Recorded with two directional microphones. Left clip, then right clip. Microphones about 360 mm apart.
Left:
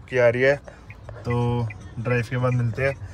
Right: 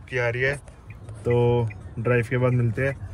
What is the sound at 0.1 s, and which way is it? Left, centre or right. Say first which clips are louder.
Speech: left 6 dB; centre.